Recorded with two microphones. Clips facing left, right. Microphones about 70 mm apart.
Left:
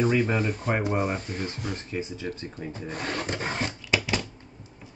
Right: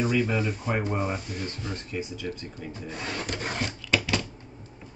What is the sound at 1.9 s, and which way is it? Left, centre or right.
Speech, left.